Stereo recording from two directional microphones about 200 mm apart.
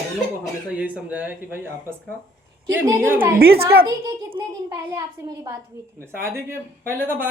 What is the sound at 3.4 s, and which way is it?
Speech, 50° right (ahead or behind).